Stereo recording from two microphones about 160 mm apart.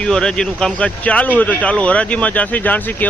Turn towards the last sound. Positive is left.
turn(degrees=10)  # may be behind; listen again after turning